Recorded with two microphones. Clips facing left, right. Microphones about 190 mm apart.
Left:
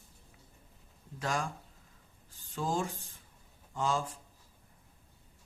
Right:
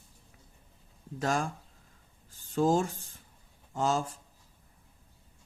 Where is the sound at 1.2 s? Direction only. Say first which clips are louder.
Right 4 dB; 45° right (ahead or behind).